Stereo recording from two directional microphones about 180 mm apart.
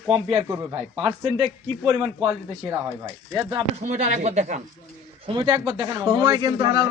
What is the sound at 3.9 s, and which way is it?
Speech, 40° right (ahead or behind).